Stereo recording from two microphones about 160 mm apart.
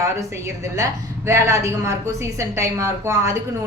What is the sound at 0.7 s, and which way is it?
A woman's voice, 20° right (ahead or behind).